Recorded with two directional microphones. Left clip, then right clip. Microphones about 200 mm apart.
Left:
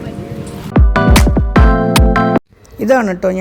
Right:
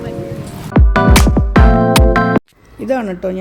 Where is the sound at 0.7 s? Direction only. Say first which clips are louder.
Even; centre (ahead or behind).